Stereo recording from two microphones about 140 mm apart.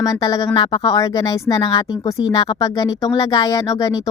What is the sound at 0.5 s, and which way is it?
Speech, 35° left (ahead or behind).